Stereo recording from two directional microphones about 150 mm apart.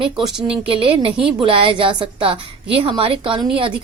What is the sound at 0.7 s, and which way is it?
A woman's voice, 35° right (ahead or behind).